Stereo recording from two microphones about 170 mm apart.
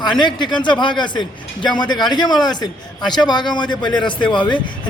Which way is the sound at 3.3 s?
25° left (ahead or behind).